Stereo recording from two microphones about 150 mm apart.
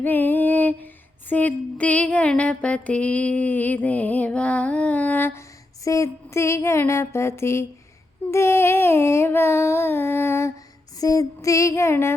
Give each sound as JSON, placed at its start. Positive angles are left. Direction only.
{"t": 0.0, "sound": "female singing", "side_deg": 15}
{"t": 1.3, "sound": "a sound", "side_deg": 10}
{"t": 11.0, "sound": "female singing", "side_deg": 25}